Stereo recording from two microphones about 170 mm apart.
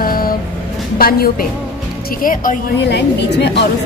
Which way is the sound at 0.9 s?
60° left (ahead or behind).